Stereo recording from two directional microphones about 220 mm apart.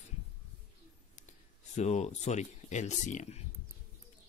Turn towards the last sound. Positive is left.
turn(degrees=30)  # may be behind; listen again after turning